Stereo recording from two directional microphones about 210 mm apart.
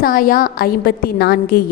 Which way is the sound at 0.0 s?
40° left (ahead or behind).